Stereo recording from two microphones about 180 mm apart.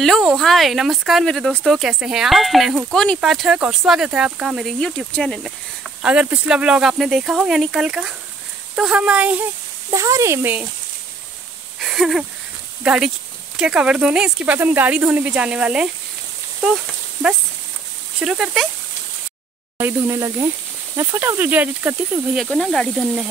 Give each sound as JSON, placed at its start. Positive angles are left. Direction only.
{"t": 0.2, "sound": "speech", "side_deg": 0}
{"t": 11.8, "sound": "a sound", "side_deg": 0}
{"t": 12.8, "sound": "speech", "side_deg": -5}
{"t": 18.2, "sound": "speech", "side_deg": -5}
{"t": 19.8, "sound": "speech", "side_deg": -10}
{"t": 22.4, "sound": "speech", "side_deg": 5}